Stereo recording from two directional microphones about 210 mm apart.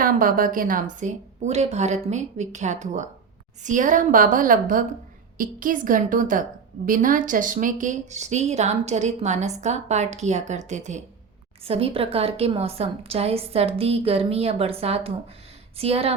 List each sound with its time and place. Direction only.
0.0 s a woman's voice: 40° right (ahead or behind)